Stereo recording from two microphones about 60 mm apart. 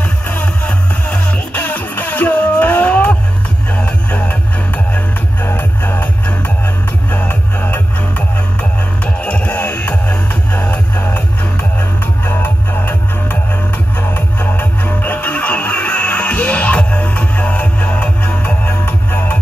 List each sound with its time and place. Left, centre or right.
0.3 s music: left
4.9 s music: left
9.0 s music: left
12.3 s music: left